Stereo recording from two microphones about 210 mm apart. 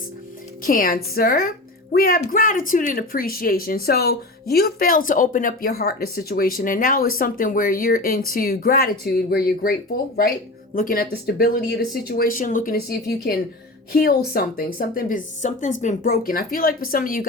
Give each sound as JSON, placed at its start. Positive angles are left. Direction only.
{"t": 0.6, "sound": "a woman's voice", "side_deg": 40}